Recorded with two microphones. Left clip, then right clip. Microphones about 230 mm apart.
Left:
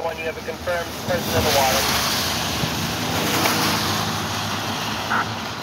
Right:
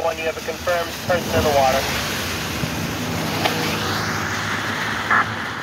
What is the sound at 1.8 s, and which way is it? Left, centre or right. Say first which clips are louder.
Vehicle: left 2 dB; left.